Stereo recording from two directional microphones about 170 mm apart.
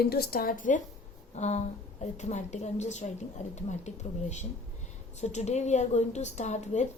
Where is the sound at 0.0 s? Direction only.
65° left (ahead or behind).